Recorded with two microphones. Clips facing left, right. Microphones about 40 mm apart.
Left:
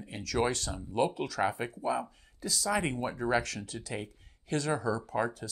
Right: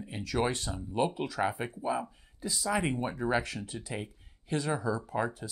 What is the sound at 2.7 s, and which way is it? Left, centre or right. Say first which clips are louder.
Speech: right 1 dB; centre.